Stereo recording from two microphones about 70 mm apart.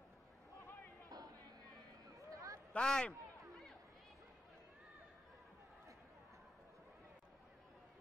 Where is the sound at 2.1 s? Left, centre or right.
Right.